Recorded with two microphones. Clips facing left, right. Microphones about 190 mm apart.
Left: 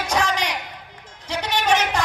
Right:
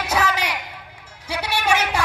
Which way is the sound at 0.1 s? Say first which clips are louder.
Right 1 dB; 10° right (ahead or behind).